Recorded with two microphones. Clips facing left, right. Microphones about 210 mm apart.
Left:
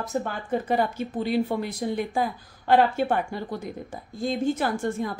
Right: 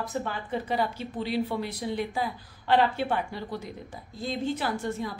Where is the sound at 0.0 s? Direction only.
45° left (ahead or behind).